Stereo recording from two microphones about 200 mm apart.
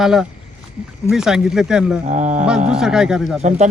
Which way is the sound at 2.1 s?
35° right (ahead or behind).